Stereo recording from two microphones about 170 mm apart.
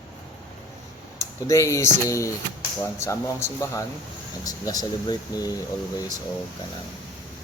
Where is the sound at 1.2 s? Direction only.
20° left (ahead or behind).